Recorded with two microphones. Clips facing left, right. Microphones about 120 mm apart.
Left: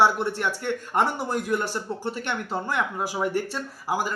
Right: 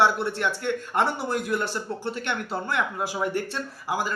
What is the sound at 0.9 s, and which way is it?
Speech, 15° left (ahead or behind).